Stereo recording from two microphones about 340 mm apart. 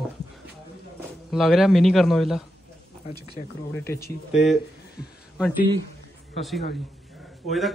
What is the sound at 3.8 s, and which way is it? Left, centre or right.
Speech, centre.